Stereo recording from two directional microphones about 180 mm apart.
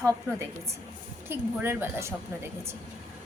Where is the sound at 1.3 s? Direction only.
10° right (ahead or behind).